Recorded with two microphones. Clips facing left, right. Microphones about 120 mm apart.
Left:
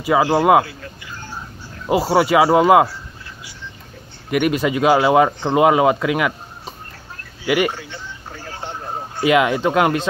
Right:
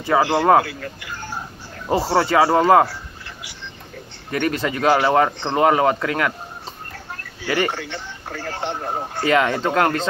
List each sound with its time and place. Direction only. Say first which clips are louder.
0.0 s speech: left 2 dB; 5° left (ahead or behind)
0.7 s speech: right 4 dB; 70° right (ahead or behind)
1.9 s speech: left 3 dB; 10° left (ahead or behind)
4.3 s speech: left 4 dB; 15° left (ahead or behind)
7.4 s speech: left 3 dB; 10° left (ahead or behind)
7.7 s a sound: right 3 dB; 75° right (ahead or behind)
9.2 s speech: left 3 dB; 10° left (ahead or behind)